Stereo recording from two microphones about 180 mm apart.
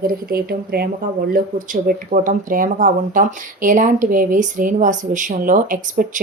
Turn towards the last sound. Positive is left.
turn(degrees=-50)  # may be behind; listen again after turning